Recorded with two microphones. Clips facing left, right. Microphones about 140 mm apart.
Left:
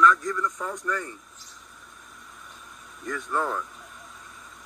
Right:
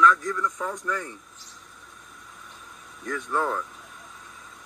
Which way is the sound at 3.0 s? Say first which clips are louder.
Right 1 dB; centre (ahead or behind).